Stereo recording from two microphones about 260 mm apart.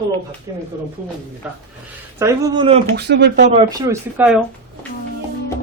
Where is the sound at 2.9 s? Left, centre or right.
Right.